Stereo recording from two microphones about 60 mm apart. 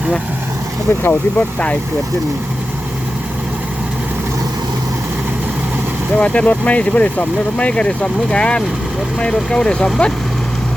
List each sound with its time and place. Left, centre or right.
0.9 s speech: left
1.4 s speech: left
6.1 s speech: left